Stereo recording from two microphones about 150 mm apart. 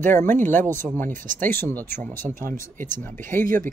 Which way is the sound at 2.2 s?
65° right (ahead or behind).